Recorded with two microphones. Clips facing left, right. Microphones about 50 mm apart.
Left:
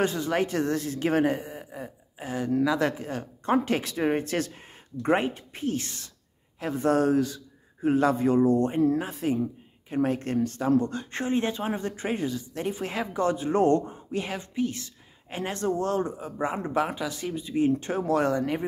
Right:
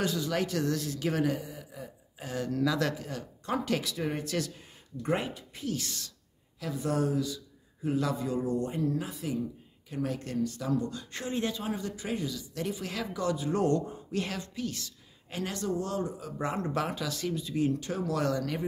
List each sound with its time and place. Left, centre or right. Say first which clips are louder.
0.0 s a man's voice: left 5 dB; left
2.2 s a man's voice: left 5 dB; left
6.6 s a man's voice: left 7 dB; left
14.1 s speech: left 4 dB; centre; by 16.1 s left
16.2 s speech: left 5 dB; left
16.4 s speech: left 4 dB; centre